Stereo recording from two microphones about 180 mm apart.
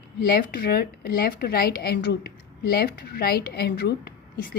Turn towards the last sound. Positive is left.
turn(degrees=60)  # may be behind; listen again after turning